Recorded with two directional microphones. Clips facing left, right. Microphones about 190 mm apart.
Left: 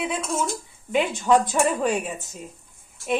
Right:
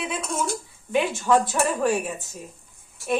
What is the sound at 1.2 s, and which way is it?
A woman's voice, 15° left (ahead or behind).